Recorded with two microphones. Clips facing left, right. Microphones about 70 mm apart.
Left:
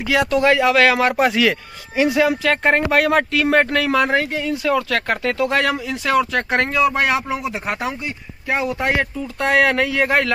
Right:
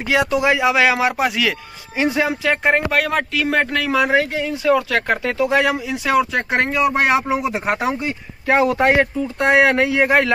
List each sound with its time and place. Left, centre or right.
0.1 s speech: centre
1.2 s speech: centre
2.0 s speech: right
2.6 s speech: centre
4.3 s speech: right
7.6 s speech: right
8.9 s speech: right